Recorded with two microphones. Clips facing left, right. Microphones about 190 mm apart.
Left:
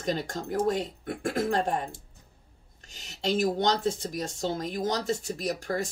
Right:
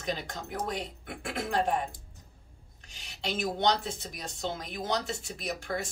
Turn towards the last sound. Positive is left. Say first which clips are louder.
# left 4 dB
turn(degrees=40)  # may be behind; listen again after turning